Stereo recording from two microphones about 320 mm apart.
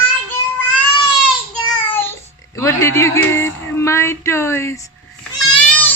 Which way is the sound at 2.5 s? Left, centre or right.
Centre.